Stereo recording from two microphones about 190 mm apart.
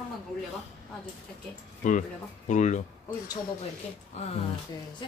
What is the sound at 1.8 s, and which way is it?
Speech, 40° left (ahead or behind).